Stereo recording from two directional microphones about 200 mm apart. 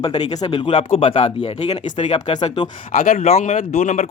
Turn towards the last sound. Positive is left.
turn(degrees=35)  # may be behind; listen again after turning